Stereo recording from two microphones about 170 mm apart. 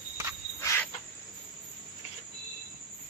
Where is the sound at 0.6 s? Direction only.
15° left (ahead or behind).